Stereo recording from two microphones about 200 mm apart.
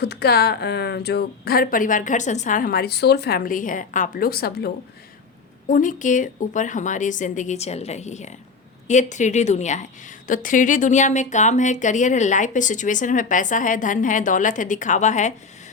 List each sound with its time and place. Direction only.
0.0 s a woman's voice: 55° left (ahead or behind); by 15.3 s 35° left (ahead or behind)